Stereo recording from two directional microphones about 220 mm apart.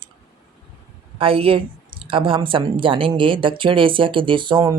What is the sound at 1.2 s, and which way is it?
A woman's voice, 25° right (ahead or behind).